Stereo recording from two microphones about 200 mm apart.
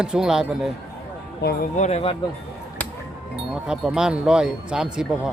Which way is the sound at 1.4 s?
55° left (ahead or behind).